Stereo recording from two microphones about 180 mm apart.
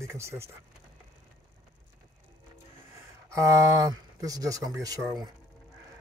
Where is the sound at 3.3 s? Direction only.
15° right (ahead or behind).